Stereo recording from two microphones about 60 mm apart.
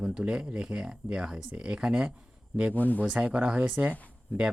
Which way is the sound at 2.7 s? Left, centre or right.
Left.